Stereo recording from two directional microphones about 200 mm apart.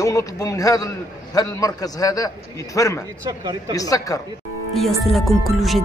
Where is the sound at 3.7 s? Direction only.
15° left (ahead or behind).